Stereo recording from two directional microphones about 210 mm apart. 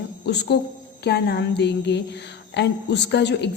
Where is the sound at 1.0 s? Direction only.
50° left (ahead or behind).